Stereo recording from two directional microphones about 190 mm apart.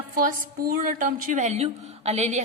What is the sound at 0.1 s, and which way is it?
A woman's voice, 50° right (ahead or behind).